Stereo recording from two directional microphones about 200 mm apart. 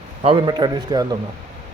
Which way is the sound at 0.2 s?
25° right (ahead or behind).